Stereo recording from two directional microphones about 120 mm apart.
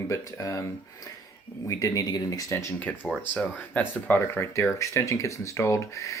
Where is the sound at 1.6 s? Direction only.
30° left (ahead or behind).